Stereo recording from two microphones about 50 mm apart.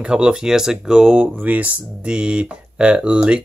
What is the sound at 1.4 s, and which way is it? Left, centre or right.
Speech, right.